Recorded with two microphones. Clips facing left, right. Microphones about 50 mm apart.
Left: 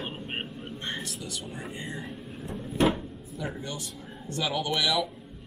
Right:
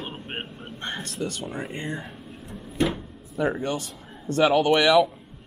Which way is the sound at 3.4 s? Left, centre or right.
Right.